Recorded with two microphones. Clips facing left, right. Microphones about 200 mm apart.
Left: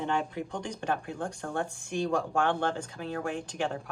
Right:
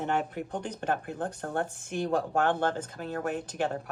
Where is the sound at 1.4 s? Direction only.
40° right (ahead or behind).